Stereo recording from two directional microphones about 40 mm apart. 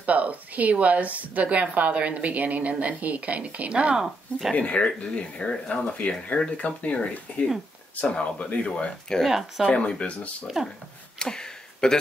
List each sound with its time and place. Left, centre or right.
0.0 s a woman's voice: right
3.9 s speech: centre
4.6 s speech: left
6.0 s speech: left
9.3 s speech: centre
9.7 s speech: left
10.6 s speech: centre
11.1 s a sound: centre